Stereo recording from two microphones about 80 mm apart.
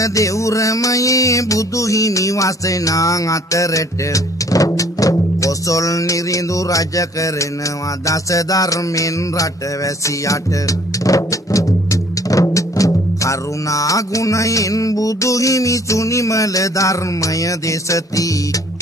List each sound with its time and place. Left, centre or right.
0.0 s music: left